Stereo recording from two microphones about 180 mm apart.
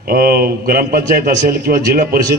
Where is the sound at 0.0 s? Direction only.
55° right (ahead or behind).